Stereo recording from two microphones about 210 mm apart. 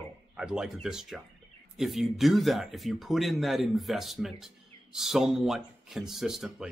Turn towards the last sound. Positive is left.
turn(degrees=0)  # may be behind; listen again after turning